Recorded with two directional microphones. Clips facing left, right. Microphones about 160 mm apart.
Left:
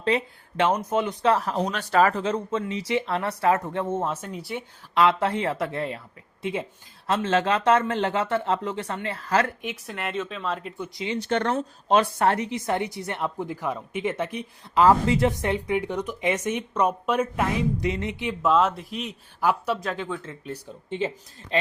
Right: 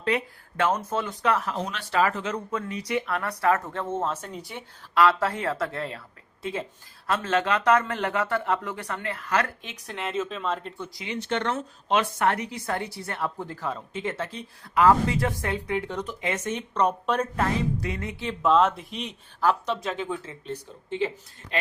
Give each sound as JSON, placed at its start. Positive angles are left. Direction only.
{"t": 0.0, "sound": "speech", "side_deg": 30}
{"t": 1.2, "sound": "speech", "side_deg": 35}
{"t": 4.9, "sound": "speech", "side_deg": 20}
{"t": 9.6, "sound": "speech", "side_deg": 5}
{"t": 10.9, "sound": "speech", "side_deg": 25}
{"t": 11.3, "sound": "a woman's voice", "side_deg": 40}
{"t": 18.4, "sound": "a woman's voice", "side_deg": 0}